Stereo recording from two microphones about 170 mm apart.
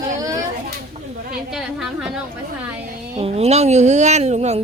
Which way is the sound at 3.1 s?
35° right (ahead or behind).